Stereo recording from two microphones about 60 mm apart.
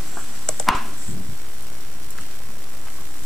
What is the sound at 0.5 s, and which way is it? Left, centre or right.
Chopping, centre.